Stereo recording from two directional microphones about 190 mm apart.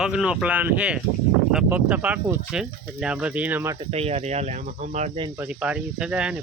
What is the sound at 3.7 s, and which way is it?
Speech, 35° right (ahead or behind).